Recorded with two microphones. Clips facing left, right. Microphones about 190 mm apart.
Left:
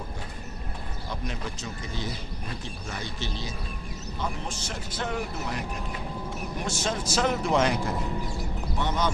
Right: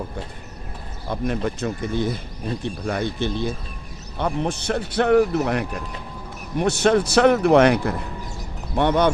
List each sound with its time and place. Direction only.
1.1 s speech: 55° right (ahead or behind)